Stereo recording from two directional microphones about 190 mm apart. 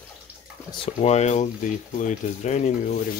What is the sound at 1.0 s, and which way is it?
Speech, 35° left (ahead or behind).